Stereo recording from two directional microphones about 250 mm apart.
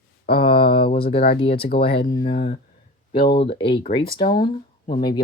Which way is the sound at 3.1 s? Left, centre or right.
Left.